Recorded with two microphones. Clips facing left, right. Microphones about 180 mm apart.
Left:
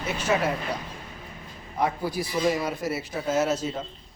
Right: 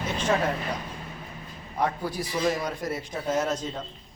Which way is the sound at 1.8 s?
10° left (ahead or behind).